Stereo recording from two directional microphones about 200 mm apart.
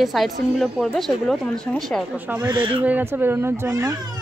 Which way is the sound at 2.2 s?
10° right (ahead or behind).